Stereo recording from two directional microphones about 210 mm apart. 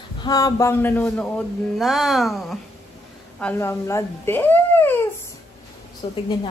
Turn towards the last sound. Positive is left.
turn(degrees=25)  # may be behind; listen again after turning